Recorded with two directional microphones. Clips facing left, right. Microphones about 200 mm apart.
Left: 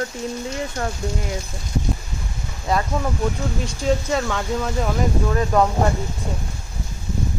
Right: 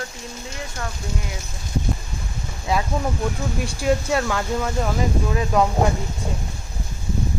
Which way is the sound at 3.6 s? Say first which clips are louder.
Right 1 dB; 10° right (ahead or behind).